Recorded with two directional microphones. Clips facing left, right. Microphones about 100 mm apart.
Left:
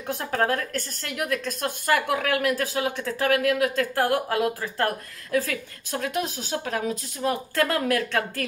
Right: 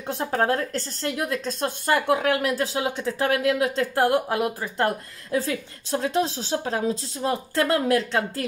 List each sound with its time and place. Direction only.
0.0 s a woman's voice: 25° right (ahead or behind)